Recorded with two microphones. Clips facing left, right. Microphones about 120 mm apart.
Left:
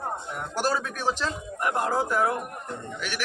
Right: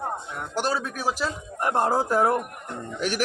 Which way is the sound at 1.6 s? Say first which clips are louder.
Right 3 dB; 35° right (ahead or behind).